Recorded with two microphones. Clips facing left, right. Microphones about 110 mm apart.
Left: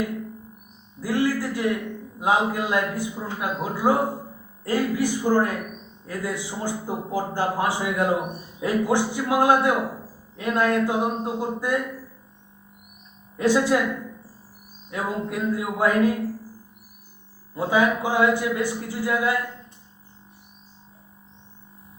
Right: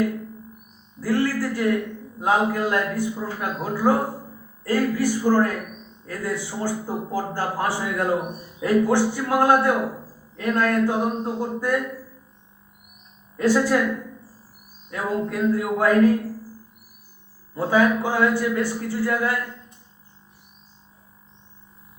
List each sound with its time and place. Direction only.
1.0 s a man's voice: 15° left (ahead or behind)
13.3 s a man's voice: 20° left (ahead or behind)
14.8 s a man's voice: 15° left (ahead or behind)
17.5 s a man's voice: 15° left (ahead or behind)